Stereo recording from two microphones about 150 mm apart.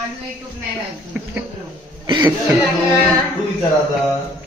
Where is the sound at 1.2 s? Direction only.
10° right (ahead or behind).